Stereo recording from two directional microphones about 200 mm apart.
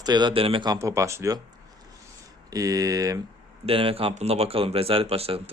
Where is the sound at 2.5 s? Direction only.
15° right (ahead or behind).